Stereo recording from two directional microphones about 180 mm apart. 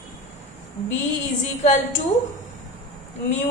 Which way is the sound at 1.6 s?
45° left (ahead or behind).